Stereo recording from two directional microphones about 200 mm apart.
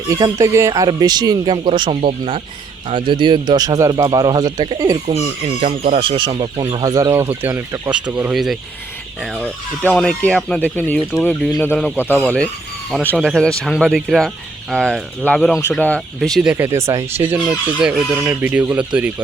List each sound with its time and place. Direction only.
0.1 s speech: 15° right (ahead or behind)